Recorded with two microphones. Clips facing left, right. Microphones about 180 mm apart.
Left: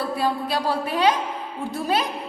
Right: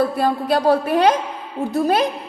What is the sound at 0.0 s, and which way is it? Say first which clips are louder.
A woman's voice: right 5 dB; 50° right (ahead or behind).